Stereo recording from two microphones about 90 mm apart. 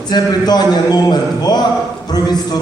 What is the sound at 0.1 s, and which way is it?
Speech, 50° left (ahead or behind).